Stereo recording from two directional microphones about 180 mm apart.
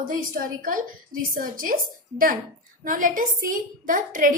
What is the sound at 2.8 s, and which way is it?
A woman's voice, 45° right (ahead or behind).